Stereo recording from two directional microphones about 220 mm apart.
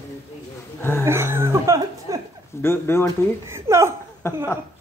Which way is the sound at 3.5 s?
10° right (ahead or behind).